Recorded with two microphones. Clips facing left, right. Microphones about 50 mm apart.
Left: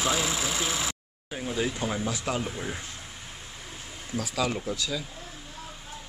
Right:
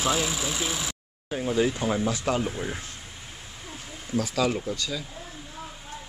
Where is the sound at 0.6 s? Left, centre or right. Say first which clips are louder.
Left 1 dB; left.